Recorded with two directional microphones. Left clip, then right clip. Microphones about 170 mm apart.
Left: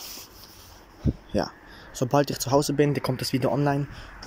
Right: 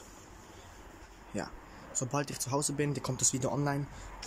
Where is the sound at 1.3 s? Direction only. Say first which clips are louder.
Left 10 dB; 25° left (ahead or behind).